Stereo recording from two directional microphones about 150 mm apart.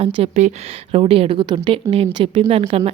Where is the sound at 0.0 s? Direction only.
45° right (ahead or behind).